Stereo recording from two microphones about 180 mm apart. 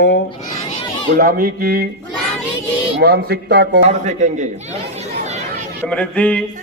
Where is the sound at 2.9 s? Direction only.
60° right (ahead or behind).